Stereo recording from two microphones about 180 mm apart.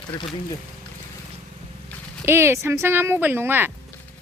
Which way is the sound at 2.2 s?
15° right (ahead or behind).